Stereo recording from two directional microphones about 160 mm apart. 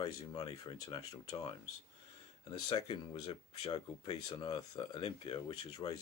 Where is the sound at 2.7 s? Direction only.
30° left (ahead or behind).